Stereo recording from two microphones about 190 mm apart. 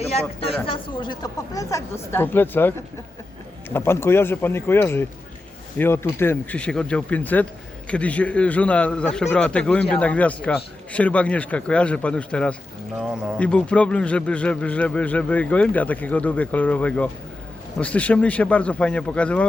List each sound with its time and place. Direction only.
0.0 s a man's voice: 30° left (ahead or behind); by 19.5 s 5° left (ahead or behind)